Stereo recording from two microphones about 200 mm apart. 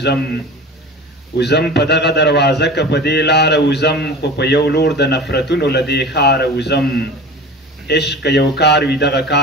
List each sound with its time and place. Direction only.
0.0 s a man's voice: 55° left (ahead or behind)
7.8 s a man's voice: 55° left (ahead or behind)